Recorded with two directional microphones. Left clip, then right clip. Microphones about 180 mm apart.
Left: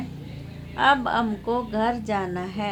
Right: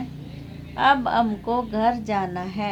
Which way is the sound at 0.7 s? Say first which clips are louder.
Right 1 dB; 40° right (ahead or behind).